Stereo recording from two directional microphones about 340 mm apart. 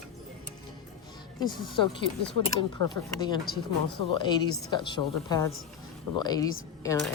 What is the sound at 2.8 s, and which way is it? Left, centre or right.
Speech, right.